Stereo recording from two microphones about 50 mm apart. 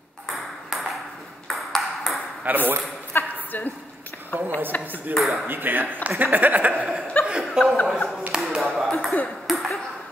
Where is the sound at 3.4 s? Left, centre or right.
Left.